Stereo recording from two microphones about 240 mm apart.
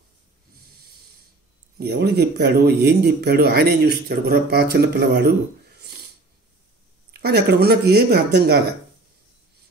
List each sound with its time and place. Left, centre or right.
1.8 s speech: right
5.8 s filing: right
7.1 s speech: right